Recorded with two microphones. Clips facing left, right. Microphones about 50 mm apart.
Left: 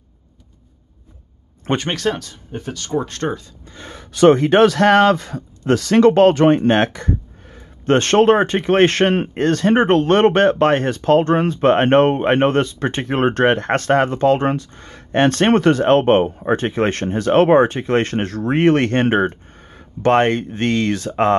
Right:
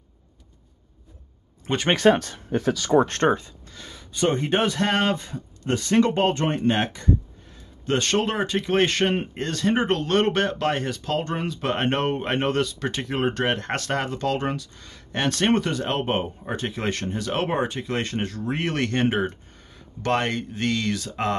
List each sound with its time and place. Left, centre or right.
1.9 s speech: right
2.5 s speech: right
3.0 s speech: right
4.1 s a man's voice: left